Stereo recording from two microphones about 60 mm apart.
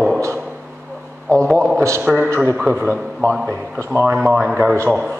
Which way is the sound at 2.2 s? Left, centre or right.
Right.